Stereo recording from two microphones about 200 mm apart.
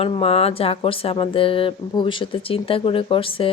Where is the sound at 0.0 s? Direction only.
30° left (ahead or behind).